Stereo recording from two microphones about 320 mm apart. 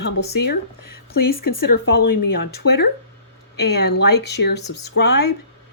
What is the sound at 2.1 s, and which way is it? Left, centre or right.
Speech, left.